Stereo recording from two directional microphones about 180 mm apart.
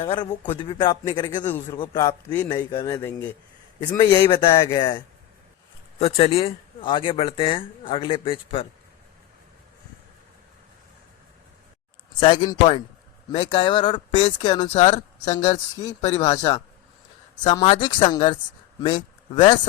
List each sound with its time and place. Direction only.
0.0 s speech: 25° left (ahead or behind)
1.5 s a man's voice: 10° left (ahead or behind)
1.8 s speech: 25° left (ahead or behind)
3.8 s speech: 25° left (ahead or behind)
12.2 s speech: 25° left (ahead or behind)
14.7 s speech: 35° left (ahead or behind)
16.3 s speech: 20° left (ahead or behind)